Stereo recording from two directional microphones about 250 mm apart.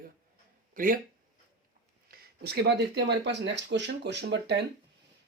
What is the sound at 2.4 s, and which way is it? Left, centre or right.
Speech, right.